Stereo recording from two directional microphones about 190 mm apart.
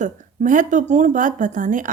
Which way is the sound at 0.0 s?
40° right (ahead or behind).